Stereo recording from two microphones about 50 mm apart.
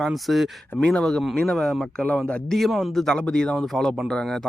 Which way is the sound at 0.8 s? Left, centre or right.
Centre.